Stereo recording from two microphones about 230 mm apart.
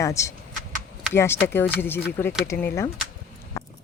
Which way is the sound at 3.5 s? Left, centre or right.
Centre.